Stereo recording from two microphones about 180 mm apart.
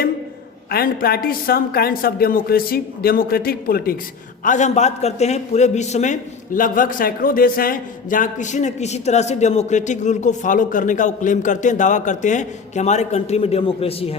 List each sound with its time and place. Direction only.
0.7 s speech: 55° left (ahead or behind)
4.4 s a man's voice: 40° left (ahead or behind)